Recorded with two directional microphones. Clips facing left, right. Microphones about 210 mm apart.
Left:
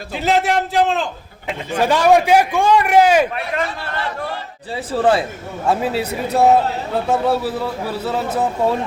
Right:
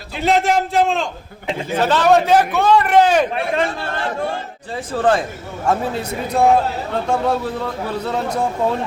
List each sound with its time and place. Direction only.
0.2 s a man's voice: centre (ahead or behind)
1.8 s a man's voice: 10° left (ahead or behind)
3.5 s speech: 30° right (ahead or behind)
4.9 s a man's voice: 10° left (ahead or behind)